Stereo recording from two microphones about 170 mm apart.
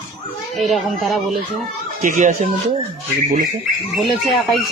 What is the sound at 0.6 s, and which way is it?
Speech, centre (ahead or behind).